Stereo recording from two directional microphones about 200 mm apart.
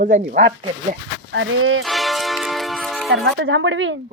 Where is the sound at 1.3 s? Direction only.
70° right (ahead or behind).